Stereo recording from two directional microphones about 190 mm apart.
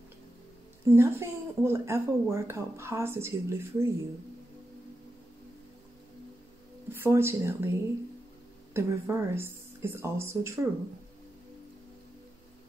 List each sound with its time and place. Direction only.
0.8 s speech: 15° right (ahead or behind)
6.9 s speech: 10° right (ahead or behind)
8.7 s speech: 10° right (ahead or behind)